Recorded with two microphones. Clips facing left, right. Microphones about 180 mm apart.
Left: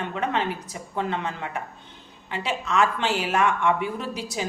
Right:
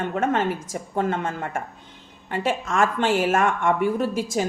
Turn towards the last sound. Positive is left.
turn(degrees=-45)  # may be behind; listen again after turning